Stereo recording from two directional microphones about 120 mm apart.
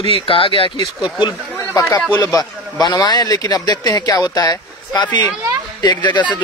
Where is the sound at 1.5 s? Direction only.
25° left (ahead or behind).